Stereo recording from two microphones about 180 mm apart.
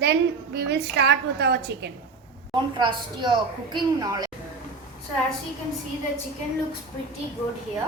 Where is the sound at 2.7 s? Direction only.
25° right (ahead or behind).